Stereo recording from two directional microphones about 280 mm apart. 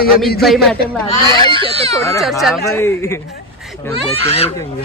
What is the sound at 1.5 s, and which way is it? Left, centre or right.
Speech, centre.